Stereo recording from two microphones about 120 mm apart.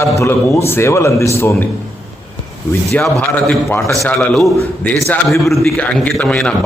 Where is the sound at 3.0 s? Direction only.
10° left (ahead or behind).